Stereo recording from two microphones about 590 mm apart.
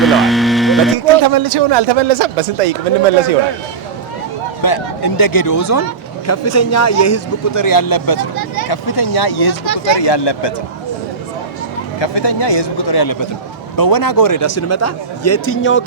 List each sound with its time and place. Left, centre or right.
0.0 s a sound: centre
0.9 s speech: right
4.6 s a man's voice: left
11.9 s a man's voice: left; by 15.8 s centre